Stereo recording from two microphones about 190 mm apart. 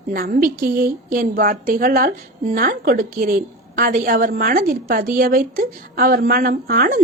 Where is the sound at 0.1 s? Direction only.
50° right (ahead or behind).